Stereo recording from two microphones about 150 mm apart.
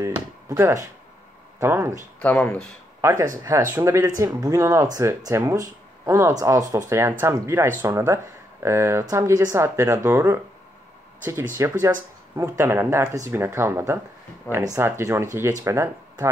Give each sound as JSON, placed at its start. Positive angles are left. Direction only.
{"t": 0.0, "sound": "speech", "side_deg": -20}
{"t": 2.1, "sound": "speech", "side_deg": 10}
{"t": 3.0, "sound": "speech", "side_deg": -20}
{"t": 11.6, "sound": "speech", "side_deg": -20}